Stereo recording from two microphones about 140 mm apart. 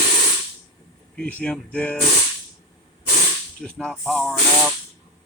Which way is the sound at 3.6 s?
5° left (ahead or behind).